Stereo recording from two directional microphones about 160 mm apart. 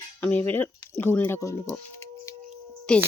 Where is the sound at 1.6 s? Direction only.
15° left (ahead or behind).